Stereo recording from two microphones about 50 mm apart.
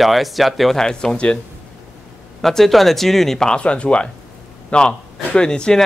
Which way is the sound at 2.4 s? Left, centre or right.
Centre.